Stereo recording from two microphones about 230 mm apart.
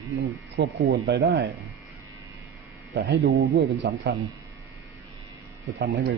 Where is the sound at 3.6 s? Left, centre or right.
Right.